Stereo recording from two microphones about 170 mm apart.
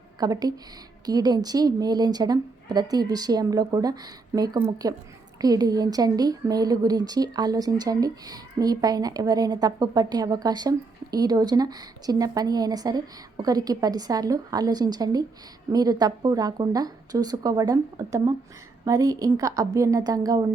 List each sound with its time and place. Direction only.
0.2 s speech: 20° right (ahead or behind)